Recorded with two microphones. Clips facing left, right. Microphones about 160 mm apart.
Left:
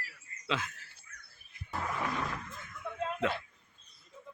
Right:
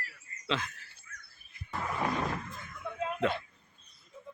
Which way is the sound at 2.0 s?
35° right (ahead or behind).